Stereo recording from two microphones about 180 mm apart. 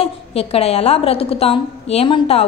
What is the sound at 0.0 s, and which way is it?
A woman's voice, 35° left (ahead or behind).